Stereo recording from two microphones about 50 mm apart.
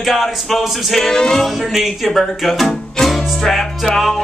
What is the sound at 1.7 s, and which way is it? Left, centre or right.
Music, centre.